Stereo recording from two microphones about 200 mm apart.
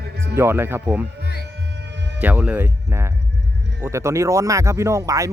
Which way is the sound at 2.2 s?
5° right (ahead or behind).